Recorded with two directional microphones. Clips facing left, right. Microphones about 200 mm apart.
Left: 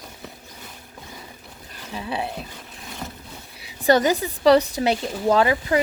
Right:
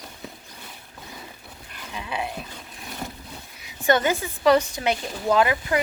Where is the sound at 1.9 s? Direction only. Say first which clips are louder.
Left 3 dB; 35° left (ahead or behind).